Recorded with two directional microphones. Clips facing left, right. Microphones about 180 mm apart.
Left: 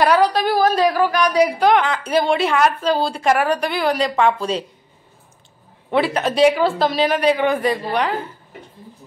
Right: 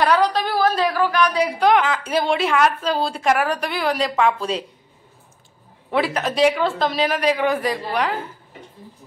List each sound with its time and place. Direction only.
0.0 s a woman's voice: 10° left (ahead or behind)
0.6 s speech: 40° left (ahead or behind)
1.6 s a woman's voice: centre (ahead or behind)
5.9 s a woman's voice: centre (ahead or behind)